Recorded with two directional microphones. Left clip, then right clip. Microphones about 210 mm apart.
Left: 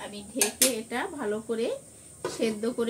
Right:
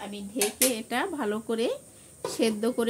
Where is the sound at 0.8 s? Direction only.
45° right (ahead or behind).